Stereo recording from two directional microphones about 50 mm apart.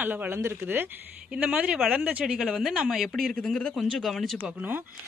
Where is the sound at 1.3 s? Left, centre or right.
Centre.